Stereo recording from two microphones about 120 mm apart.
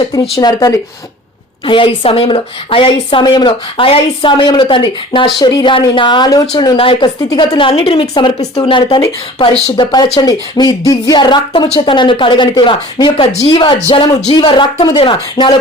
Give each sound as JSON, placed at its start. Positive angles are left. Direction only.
{"t": 0.0, "sound": "speech", "side_deg": 35}
{"t": 1.6, "sound": "a woman's voice", "side_deg": 45}
{"t": 9.4, "sound": "speech", "side_deg": 60}
{"t": 9.7, "sound": "speech", "side_deg": 40}
{"t": 13.7, "sound": "speech", "side_deg": 60}
{"t": 14.3, "sound": "speech", "side_deg": 45}